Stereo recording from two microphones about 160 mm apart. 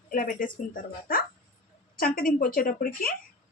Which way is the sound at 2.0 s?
60° left (ahead or behind).